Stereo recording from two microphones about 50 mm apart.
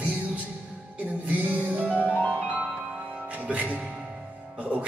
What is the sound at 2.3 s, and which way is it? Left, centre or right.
Music, right.